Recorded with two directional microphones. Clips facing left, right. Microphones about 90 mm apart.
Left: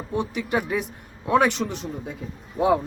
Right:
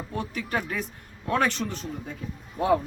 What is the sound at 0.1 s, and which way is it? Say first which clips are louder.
Speech: left 6 dB; 15° left (ahead or behind).